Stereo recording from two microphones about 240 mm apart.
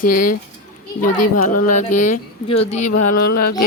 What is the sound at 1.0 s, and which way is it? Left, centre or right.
Speech, left.